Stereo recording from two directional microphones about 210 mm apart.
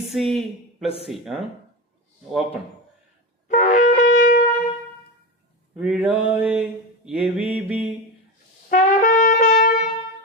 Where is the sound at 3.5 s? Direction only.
35° left (ahead or behind).